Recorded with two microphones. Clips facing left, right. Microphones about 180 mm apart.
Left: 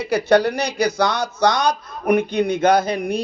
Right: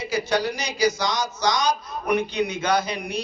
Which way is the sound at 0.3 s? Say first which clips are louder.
Left 8 dB; 60° left (ahead or behind).